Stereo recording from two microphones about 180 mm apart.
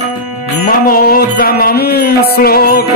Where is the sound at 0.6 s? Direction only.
55° left (ahead or behind).